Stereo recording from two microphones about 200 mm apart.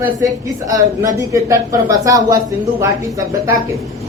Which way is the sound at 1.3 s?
15° right (ahead or behind).